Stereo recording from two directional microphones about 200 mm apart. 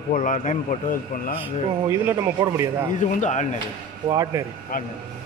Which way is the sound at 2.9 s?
35° left (ahead or behind).